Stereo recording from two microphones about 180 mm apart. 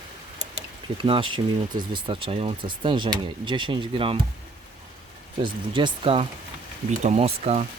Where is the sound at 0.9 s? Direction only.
30° right (ahead or behind).